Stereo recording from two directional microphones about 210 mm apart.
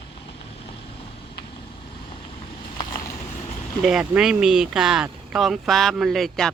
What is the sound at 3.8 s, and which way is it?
Speech, 5° right (ahead or behind).